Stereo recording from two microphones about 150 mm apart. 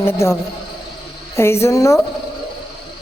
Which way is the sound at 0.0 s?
15° left (ahead or behind).